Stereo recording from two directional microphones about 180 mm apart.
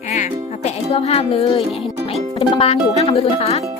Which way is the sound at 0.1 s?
40° left (ahead or behind).